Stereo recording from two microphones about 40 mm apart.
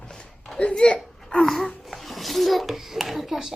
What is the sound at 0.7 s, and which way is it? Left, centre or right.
Speech, left.